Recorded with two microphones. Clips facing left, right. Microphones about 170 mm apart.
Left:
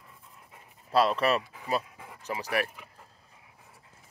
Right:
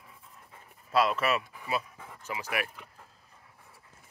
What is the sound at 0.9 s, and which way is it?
Speech, 35° left (ahead or behind).